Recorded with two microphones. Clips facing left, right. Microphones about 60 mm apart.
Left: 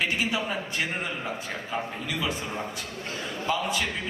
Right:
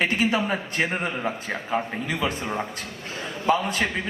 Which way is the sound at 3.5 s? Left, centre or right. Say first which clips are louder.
Right 6 dB; right.